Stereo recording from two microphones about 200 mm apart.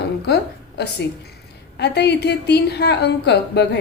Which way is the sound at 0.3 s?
55° left (ahead or behind).